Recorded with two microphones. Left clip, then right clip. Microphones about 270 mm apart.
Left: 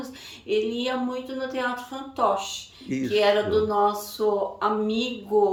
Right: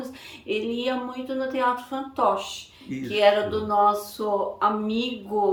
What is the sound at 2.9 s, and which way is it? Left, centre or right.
Speech, centre.